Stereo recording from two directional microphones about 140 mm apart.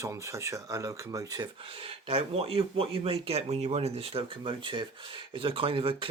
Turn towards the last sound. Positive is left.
turn(degrees=-40)  # may be behind; listen again after turning